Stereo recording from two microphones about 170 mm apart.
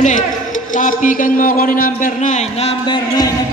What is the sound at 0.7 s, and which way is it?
A man's voice, 50° left (ahead or behind).